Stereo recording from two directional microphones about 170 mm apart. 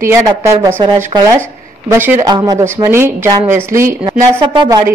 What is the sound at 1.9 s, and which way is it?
A woman's voice, 15° right (ahead or behind).